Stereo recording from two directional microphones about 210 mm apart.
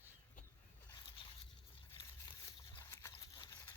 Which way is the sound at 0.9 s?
20° left (ahead or behind).